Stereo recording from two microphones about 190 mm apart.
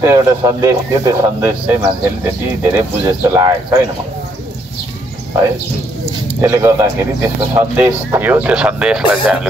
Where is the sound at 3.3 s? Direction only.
15° right (ahead or behind).